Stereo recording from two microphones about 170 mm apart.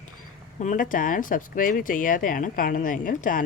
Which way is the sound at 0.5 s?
50° left (ahead or behind).